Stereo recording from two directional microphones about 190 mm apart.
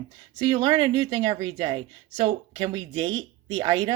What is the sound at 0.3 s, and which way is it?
Speech, 25° right (ahead or behind).